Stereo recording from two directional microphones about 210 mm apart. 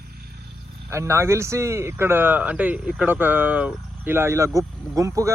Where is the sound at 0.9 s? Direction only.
15° right (ahead or behind).